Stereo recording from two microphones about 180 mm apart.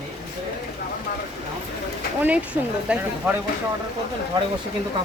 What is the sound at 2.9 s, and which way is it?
Speech, 5° right (ahead or behind).